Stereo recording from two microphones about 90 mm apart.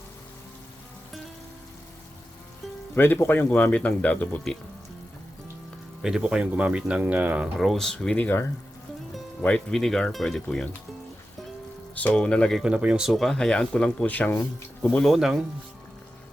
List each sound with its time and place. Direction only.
2.9 s speech: 25° left (ahead or behind)
6.0 s speech: 5° right (ahead or behind)
7.5 s speech: centre (ahead or behind); by 8.4 s 15° left (ahead or behind)
9.4 s speech: 10° left (ahead or behind)
11.9 s speech: 15° left (ahead or behind)
12.6 s speech: 10° right (ahead or behind); by 15.1 s 15° left (ahead or behind)
15.1 s speech: 5° right (ahead or behind)